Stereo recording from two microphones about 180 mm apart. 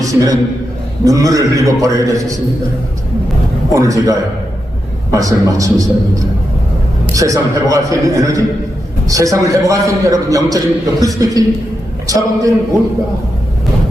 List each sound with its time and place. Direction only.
0.0 s a man's voice: 20° right (ahead or behind)
3.7 s a man's voice: 20° right (ahead or behind)
7.2 s a man's voice: 20° right (ahead or behind)